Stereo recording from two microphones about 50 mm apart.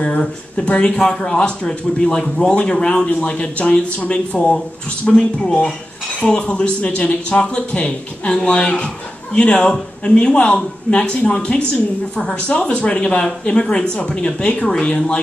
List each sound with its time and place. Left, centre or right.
0.2 s speech: centre